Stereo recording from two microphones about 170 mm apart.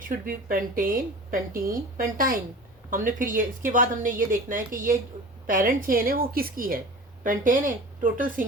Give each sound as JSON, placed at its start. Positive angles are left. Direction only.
{"t": 0.4, "sound": "a woman's voice", "side_deg": -55}